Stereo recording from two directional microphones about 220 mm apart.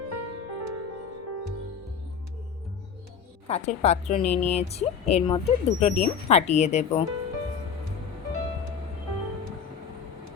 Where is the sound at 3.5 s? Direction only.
30° left (ahead or behind).